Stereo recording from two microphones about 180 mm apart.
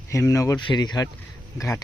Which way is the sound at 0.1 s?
15° left (ahead or behind).